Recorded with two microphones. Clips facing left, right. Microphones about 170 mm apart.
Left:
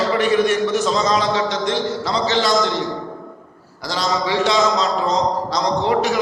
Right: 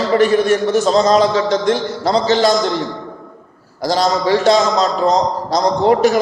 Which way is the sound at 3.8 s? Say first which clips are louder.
Right 6 dB; 45° right (ahead or behind).